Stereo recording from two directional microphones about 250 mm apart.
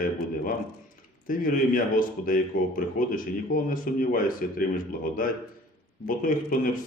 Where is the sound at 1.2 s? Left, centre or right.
Left.